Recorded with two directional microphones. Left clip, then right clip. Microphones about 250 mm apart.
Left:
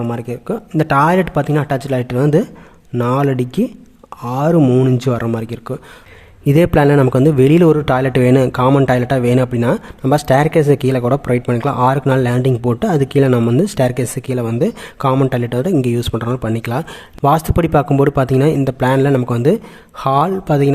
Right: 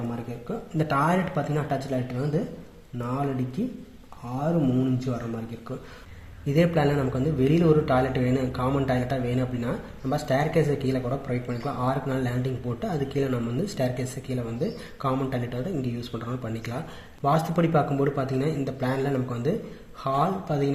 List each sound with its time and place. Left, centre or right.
0.4 s speech: left
4.8 s speech: left
6.4 s speech: left